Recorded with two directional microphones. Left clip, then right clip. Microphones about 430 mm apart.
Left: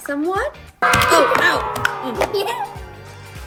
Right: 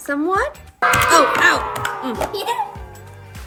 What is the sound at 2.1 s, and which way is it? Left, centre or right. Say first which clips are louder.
Music: left 2 dB; centre.